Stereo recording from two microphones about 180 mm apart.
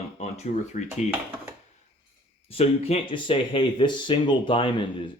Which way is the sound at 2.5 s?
35° left (ahead or behind).